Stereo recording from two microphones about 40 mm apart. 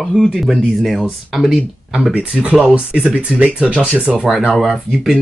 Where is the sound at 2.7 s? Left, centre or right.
Right.